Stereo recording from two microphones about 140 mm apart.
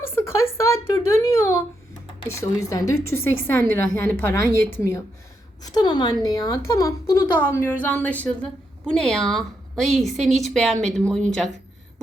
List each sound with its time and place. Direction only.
0.0 s a sound: 15° left (ahead or behind)
2.2 s speech: 20° left (ahead or behind)
5.6 s a woman's voice: 30° left (ahead or behind); by 11.5 s 5° left (ahead or behind)